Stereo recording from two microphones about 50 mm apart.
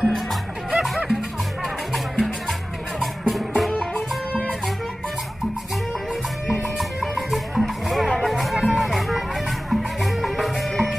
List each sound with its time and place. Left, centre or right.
0.7 s music: centre
1.9 s music: centre
6.5 s music: centre